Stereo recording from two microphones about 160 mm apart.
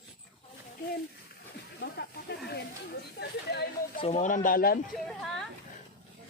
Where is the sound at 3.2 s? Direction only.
90° left.